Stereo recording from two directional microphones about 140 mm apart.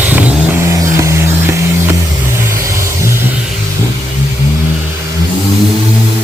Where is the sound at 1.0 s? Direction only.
20° right (ahead or behind).